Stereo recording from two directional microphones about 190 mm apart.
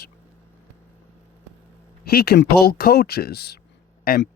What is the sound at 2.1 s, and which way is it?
Speech, 55° left (ahead or behind).